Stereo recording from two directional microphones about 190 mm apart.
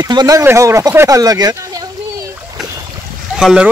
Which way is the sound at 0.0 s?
20° right (ahead or behind).